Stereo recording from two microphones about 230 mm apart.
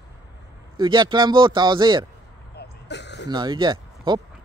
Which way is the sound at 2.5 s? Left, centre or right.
Left.